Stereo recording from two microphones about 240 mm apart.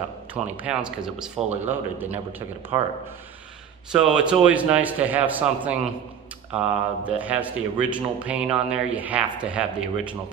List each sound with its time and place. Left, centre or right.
0.3 s speech: centre
3.9 s speech: centre